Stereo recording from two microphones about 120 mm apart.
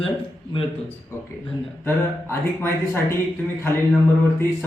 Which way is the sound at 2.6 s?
20° left (ahead or behind).